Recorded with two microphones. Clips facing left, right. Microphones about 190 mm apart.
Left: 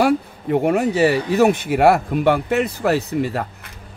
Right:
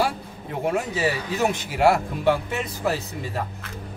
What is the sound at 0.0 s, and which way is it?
Speech, 65° left (ahead or behind).